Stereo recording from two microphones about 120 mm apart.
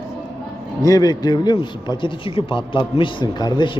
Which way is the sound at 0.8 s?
30° left (ahead or behind).